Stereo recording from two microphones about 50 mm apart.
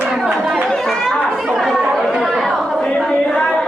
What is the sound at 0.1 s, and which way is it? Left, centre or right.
Chatter, centre.